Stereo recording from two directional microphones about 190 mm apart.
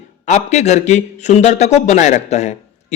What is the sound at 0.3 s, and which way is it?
A man's voice, 35° left (ahead or behind).